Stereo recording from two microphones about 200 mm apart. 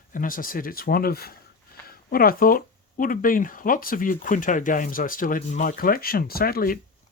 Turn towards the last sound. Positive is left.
turn(degrees=45)  # may be behind; listen again after turning